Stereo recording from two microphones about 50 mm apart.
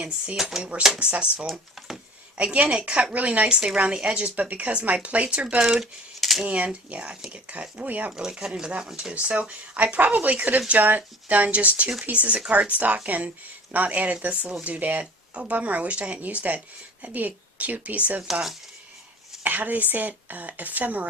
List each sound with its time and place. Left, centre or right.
0.3 s speech: centre
4.2 s speech: right
5.6 s speech: centre
6.4 s a woman's voice: right
8.1 s speech: centre
9.1 s a woman's voice: right
19.4 s a woman's voice: right